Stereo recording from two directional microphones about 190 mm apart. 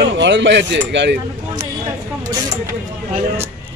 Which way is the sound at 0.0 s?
70° right (ahead or behind).